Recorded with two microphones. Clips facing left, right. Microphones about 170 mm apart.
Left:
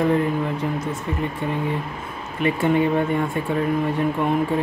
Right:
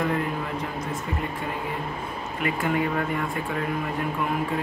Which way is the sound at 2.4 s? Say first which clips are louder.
Left 6 dB; 25° left (ahead or behind).